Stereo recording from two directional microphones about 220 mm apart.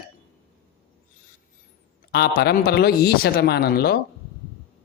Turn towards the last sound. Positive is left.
turn(degrees=45)  # may be behind; listen again after turning